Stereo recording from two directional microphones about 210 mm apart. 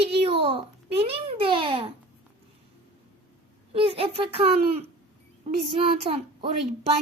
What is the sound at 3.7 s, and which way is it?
A woman's voice, 25° right (ahead or behind).